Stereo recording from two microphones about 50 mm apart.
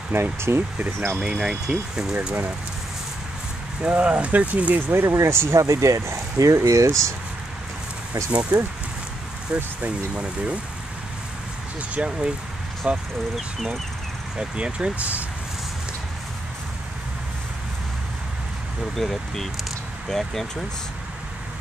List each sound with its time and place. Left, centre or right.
0.1 s speech: right
1.2 s speech: centre
3.8 s speech: right
5.0 s speech: right
8.5 s speech: right
9.8 s speech: right
11.9 s speech: right
14.4 s speech: right
18.9 s speech: centre